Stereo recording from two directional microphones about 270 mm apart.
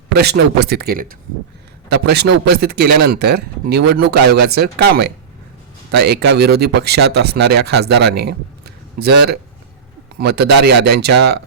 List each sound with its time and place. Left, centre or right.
0.1 s speech: right